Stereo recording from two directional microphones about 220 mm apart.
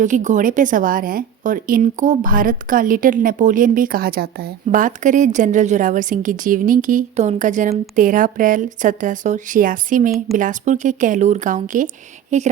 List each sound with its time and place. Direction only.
0.0 s a woman's voice: 35° right (ahead or behind)